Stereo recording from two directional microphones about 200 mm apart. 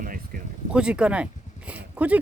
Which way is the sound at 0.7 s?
5° right (ahead or behind).